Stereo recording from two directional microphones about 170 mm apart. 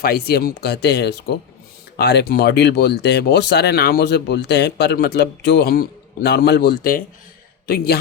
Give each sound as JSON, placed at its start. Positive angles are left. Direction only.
{"t": 0.0, "sound": "speech", "side_deg": 65}